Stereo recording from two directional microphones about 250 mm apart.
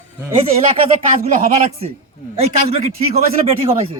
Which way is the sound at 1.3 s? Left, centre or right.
Right.